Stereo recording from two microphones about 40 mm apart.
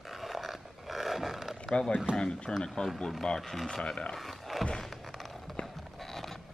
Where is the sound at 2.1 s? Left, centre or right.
Left.